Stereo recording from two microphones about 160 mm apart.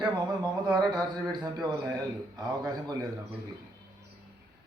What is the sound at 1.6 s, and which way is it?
Speech, 30° right (ahead or behind).